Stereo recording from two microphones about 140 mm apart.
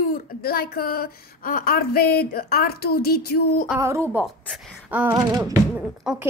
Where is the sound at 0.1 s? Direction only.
90° left.